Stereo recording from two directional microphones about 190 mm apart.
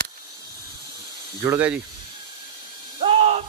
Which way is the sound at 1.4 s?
10° right (ahead or behind).